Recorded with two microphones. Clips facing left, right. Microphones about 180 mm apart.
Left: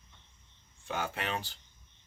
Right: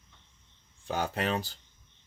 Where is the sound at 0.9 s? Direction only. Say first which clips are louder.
Right 5 dB; 35° right (ahead or behind).